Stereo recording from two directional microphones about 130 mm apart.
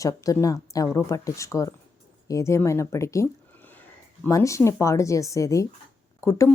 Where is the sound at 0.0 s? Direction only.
25° left (ahead or behind).